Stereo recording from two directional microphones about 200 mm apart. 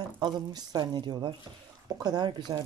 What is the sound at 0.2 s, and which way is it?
Speech, 20° right (ahead or behind).